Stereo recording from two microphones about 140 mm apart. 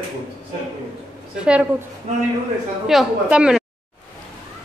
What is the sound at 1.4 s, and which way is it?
Speech, 10° right (ahead or behind).